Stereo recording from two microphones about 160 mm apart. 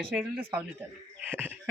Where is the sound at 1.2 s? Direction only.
10° right (ahead or behind).